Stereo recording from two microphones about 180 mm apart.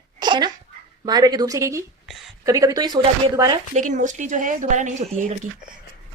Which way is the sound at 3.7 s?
45° right (ahead or behind).